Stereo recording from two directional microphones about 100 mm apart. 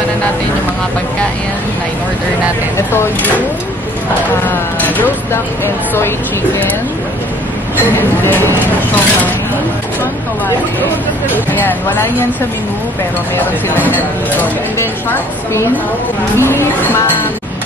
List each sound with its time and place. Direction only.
2.9 s speech: 20° left (ahead or behind)
4.5 s speech: 20° left (ahead or behind)
11.3 s speech: 20° left (ahead or behind)
13.7 s speech: 15° left (ahead or behind)